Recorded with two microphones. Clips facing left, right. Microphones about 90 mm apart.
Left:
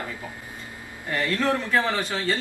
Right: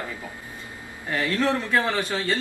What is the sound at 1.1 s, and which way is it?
Speech, 10° right (ahead or behind).